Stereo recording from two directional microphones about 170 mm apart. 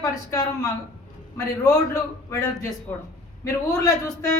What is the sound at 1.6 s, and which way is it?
A woman's voice, 15° left (ahead or behind).